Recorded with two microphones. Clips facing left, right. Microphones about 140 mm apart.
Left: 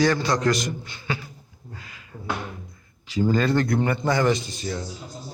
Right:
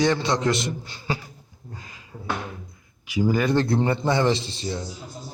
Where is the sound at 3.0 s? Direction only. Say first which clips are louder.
Even; 10° right (ahead or behind).